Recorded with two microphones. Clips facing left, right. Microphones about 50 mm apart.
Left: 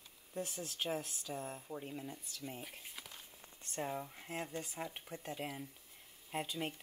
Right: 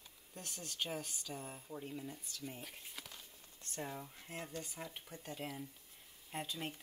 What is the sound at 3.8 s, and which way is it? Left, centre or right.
Speech, centre.